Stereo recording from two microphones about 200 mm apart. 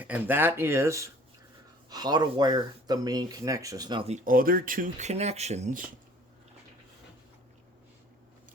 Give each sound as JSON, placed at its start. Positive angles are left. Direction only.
{"t": 0.0, "sound": "speech", "side_deg": -10}
{"t": 4.1, "sound": "speech", "side_deg": -40}